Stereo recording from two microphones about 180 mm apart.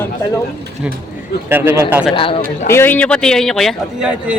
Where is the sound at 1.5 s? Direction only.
10° right (ahead or behind).